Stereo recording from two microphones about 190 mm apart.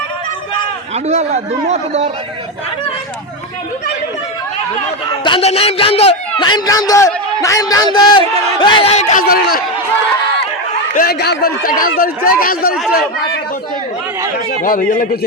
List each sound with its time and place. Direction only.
0.9 s a man's voice: 35° right (ahead or behind)
5.2 s a man's voice: 30° left (ahead or behind)
9.2 s speech: 55° left (ahead or behind)
10.9 s speech: 55° left (ahead or behind)
14.6 s speech: 45° left (ahead or behind)